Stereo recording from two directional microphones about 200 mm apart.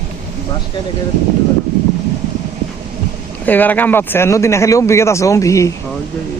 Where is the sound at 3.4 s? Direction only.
10° left (ahead or behind).